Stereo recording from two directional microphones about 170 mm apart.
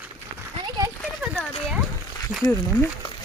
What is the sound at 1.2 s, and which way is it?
Horse, centre (ahead or behind).